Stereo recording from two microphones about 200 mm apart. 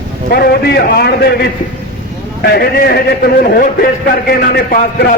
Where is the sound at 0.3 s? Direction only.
50° left (ahead or behind).